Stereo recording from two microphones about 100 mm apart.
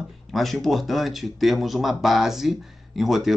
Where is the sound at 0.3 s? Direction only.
Centre (ahead or behind).